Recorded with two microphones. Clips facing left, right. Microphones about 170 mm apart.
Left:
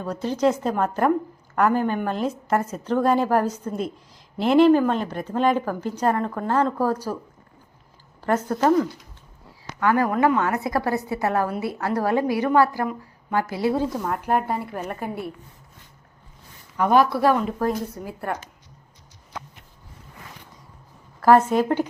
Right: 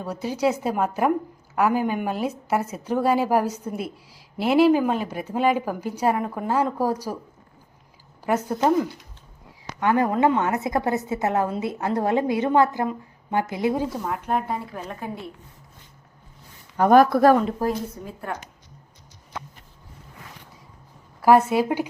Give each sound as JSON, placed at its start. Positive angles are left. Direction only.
{"t": 0.0, "sound": "a woman's voice", "side_deg": -10}
{"t": 8.2, "sound": "a woman's voice", "side_deg": -10}
{"t": 9.8, "sound": "a woman's voice", "side_deg": -20}
{"t": 14.0, "sound": "a woman's voice", "side_deg": 0}
{"t": 16.7, "sound": "speech", "side_deg": -45}
{"t": 18.0, "sound": "a woman's voice", "side_deg": 5}
{"t": 21.2, "sound": "a woman's voice", "side_deg": -10}